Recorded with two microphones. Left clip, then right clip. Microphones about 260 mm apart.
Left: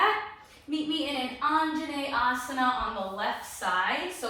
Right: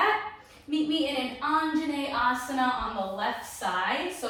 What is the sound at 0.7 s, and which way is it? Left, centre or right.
A woman's voice, centre.